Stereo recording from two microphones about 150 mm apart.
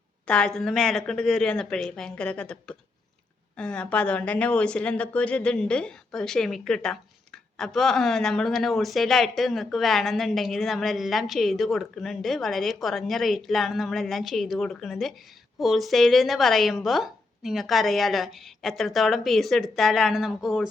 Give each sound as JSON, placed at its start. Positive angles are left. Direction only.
{"t": 0.3, "sound": "speech", "side_deg": 5}